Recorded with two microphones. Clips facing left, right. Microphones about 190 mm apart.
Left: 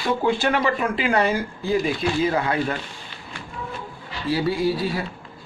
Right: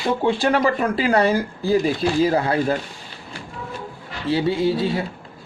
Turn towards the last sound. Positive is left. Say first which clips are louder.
# right 3 dB
turn(degrees=-25)  # may be behind; listen again after turning